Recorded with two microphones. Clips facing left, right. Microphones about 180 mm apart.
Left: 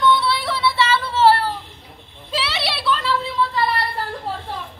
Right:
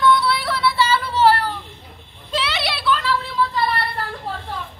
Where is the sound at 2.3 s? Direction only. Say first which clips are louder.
Right 1 dB; 5° left (ahead or behind).